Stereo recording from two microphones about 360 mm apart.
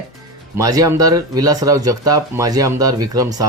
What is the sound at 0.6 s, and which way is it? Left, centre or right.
Speech, centre.